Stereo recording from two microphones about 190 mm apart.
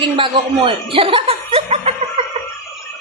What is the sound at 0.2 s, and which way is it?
Speech, 25° right (ahead or behind).